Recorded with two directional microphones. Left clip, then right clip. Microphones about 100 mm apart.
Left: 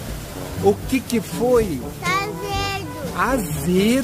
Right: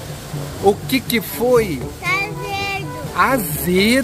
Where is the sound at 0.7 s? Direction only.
Centre (ahead or behind).